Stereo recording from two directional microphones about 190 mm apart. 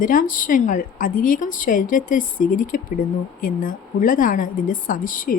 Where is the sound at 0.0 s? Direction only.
45° left (ahead or behind).